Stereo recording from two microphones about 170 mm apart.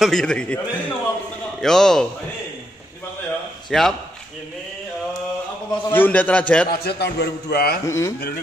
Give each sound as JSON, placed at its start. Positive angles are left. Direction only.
{"t": 0.0, "sound": "a man's voice", "side_deg": 0}
{"t": 3.7, "sound": "a man's voice", "side_deg": 0}
{"t": 5.9, "sound": "a man's voice", "side_deg": 10}
{"t": 6.7, "sound": "a man's voice", "side_deg": 65}
{"t": 7.8, "sound": "speech", "side_deg": 20}